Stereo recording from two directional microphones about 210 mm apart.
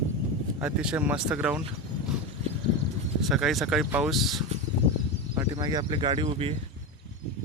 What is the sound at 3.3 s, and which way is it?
Speech, centre (ahead or behind).